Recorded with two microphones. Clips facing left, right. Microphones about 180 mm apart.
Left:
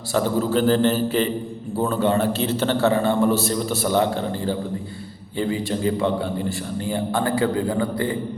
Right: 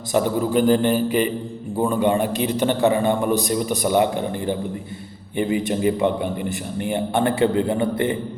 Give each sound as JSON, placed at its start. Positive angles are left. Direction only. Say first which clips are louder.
{"t": 0.1, "sound": "a man's voice", "louder": "right 1 dB", "side_deg": -15}